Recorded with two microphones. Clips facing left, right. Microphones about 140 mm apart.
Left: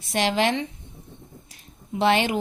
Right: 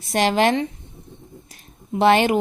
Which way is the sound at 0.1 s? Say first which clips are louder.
Right 4 dB; 45° right (ahead or behind).